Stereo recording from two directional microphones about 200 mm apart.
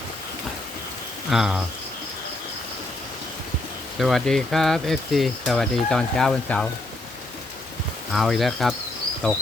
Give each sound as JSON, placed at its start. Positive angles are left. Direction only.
{"t": 1.3, "sound": "speech", "side_deg": 0}
{"t": 3.9, "sound": "speech", "side_deg": 0}
{"t": 8.1, "sound": "speech", "side_deg": 0}